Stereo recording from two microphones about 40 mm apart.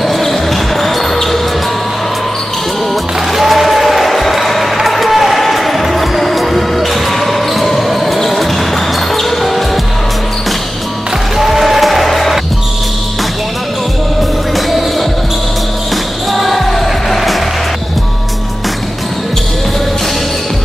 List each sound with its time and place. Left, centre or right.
0.0 s basketball bounce: centre
3.3 s music: centre
9.1 s basketball bounce: centre
11.3 s music: centre
14.5 s music: centre
16.3 s music: centre